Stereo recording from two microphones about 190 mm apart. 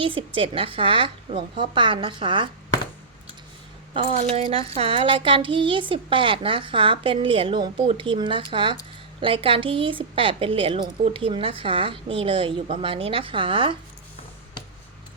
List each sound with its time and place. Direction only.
0.0 s a woman's voice: 25° right (ahead or behind)
4.2 s a woman's voice: 35° right (ahead or behind)